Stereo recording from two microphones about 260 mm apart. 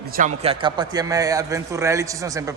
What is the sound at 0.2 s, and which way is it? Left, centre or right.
A man's voice, centre.